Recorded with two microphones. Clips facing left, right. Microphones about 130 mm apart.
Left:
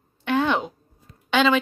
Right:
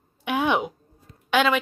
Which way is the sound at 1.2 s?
5° right (ahead or behind).